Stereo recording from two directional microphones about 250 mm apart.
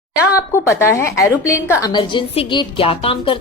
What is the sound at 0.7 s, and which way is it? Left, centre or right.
A woman's voice, centre.